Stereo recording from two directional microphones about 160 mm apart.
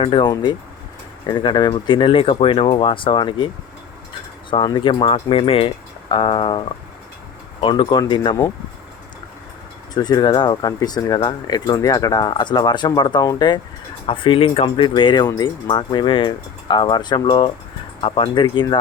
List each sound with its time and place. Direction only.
0.0 s speech: 30° left (ahead or behind)
4.5 s speech: 30° left (ahead or behind)
7.6 s speech: 30° left (ahead or behind)
9.9 s speech: 25° left (ahead or behind)